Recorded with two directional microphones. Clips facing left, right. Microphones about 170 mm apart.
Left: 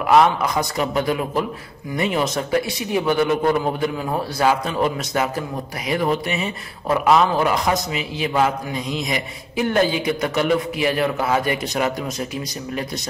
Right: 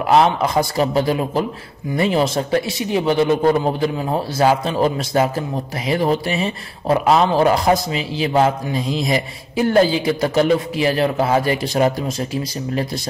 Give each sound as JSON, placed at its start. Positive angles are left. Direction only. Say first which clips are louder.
{"t": 0.0, "sound": "a man's voice", "louder": "right 1 dB", "side_deg": -30}